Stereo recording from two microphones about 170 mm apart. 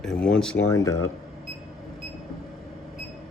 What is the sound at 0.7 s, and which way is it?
Speech, 20° left (ahead or behind).